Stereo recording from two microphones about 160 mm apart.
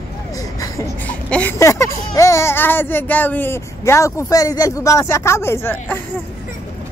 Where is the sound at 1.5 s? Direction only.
20° left (ahead or behind).